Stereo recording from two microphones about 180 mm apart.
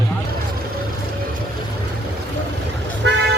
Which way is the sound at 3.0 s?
80° right.